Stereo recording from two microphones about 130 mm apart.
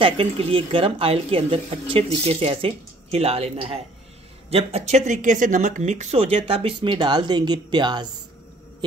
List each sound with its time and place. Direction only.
0.0 s a woman's voice: 45° right (ahead or behind)